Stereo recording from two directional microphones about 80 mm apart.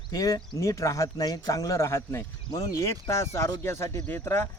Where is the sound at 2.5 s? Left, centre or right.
Left.